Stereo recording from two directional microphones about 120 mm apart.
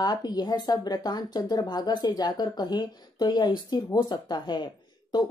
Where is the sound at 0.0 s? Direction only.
35° left (ahead or behind).